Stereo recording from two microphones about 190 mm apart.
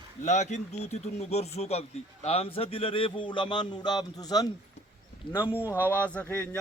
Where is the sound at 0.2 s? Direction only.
40° left (ahead or behind).